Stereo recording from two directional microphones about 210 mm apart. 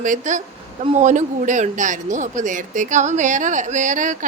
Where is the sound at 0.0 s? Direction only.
35° right (ahead or behind).